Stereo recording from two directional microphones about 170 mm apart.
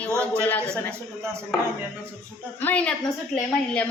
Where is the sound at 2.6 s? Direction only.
10° left (ahead or behind).